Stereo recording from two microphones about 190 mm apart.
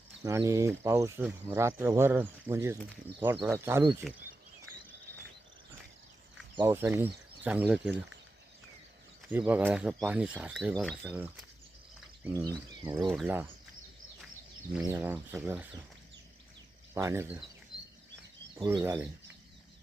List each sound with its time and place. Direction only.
0.2 s speech: 15° right (ahead or behind)
4.1 s speech: centre (ahead or behind)
6.6 s speech: 10° right (ahead or behind)
9.3 s speech: 10° right (ahead or behind)
12.5 s speech: 20° right (ahead or behind)
14.8 s speech: 10° right (ahead or behind)
16.9 s speech: 15° right (ahead or behind)
18.5 s speech: 20° right (ahead or behind)